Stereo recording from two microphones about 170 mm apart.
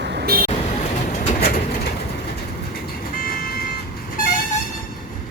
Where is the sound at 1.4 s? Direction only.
55° left (ahead or behind).